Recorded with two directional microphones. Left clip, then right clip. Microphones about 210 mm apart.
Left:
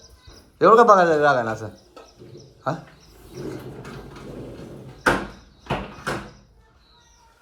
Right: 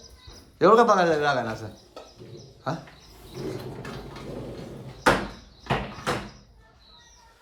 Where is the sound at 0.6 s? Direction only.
10° right (ahead or behind).